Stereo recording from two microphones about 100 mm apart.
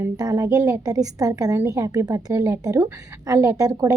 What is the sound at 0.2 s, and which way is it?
A woman's voice, 40° right (ahead or behind).